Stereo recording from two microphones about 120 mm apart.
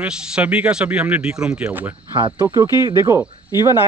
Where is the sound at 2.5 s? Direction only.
30° right (ahead or behind).